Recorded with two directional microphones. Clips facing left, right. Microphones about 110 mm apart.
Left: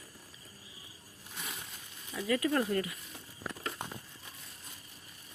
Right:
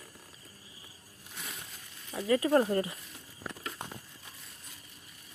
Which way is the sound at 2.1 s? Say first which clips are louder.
Right 4 dB; 30° right (ahead or behind).